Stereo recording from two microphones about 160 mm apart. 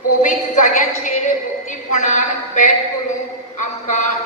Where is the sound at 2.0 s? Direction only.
50° left (ahead or behind).